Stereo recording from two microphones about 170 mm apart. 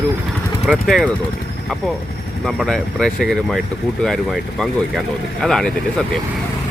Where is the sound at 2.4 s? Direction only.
5° left (ahead or behind).